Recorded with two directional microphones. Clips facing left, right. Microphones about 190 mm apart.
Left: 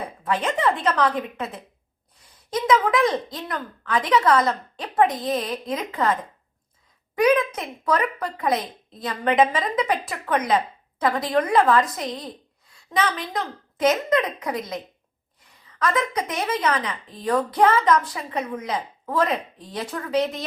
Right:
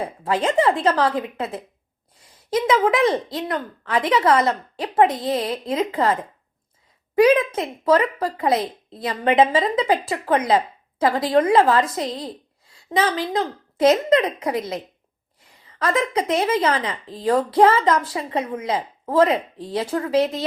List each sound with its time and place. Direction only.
0.3 s speech: 30° right (ahead or behind)
2.6 s speech: 25° right (ahead or behind)
7.2 s speech: 30° right (ahead or behind)